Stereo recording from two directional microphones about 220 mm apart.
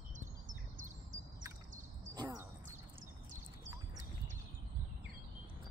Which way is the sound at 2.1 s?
20° right (ahead or behind).